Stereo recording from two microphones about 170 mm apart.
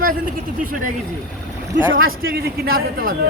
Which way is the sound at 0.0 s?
50° right (ahead or behind).